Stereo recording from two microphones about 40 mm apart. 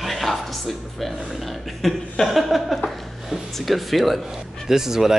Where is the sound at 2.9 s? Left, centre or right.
Centre.